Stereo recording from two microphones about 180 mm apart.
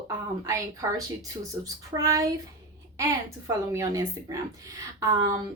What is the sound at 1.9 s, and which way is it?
A woman's voice, 20° right (ahead or behind).